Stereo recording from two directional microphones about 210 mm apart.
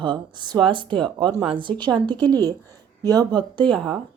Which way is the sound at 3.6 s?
Centre (ahead or behind).